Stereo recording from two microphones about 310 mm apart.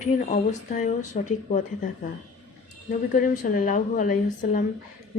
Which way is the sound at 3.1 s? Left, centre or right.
Left.